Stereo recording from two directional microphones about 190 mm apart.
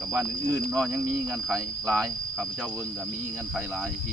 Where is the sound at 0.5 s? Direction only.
20° right (ahead or behind).